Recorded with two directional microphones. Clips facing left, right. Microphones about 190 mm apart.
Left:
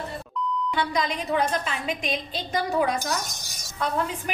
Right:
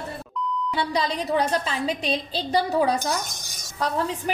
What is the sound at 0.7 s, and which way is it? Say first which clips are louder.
A woman's voice: right 3 dB; 35° right (ahead or behind).